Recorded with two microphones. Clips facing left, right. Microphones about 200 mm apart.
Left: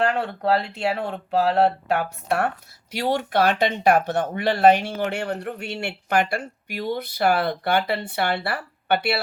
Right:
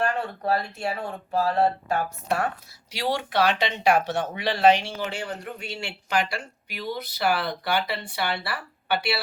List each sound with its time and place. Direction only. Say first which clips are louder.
0.0 s speech: left 4 dB; 70° left (ahead or behind)
2.9 s speech: left 4 dB; 50° left (ahead or behind)